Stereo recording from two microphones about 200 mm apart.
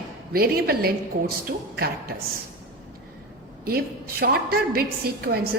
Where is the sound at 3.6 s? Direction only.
50° right (ahead or behind).